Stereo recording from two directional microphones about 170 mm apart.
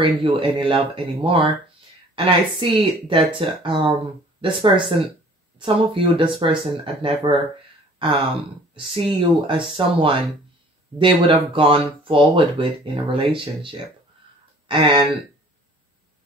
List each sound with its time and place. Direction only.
0.0 s speech: 30° right (ahead or behind)